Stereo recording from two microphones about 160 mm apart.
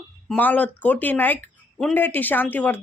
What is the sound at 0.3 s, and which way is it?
Speech, 10° left (ahead or behind).